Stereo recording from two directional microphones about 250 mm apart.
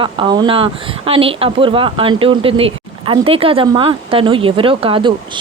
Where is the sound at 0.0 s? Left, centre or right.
Centre.